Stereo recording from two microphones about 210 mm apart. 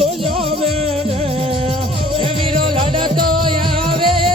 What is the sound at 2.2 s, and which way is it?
Music, 25° right (ahead or behind).